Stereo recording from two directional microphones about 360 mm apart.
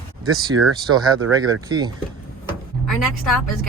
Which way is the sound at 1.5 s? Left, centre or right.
Centre.